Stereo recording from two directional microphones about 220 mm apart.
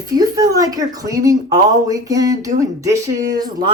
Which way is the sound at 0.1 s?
15° right (ahead or behind).